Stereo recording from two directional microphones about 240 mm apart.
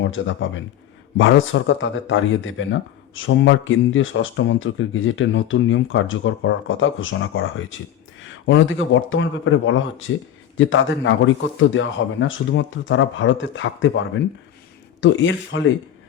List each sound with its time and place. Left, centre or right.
0.0 s speech: left
15.0 s speech: left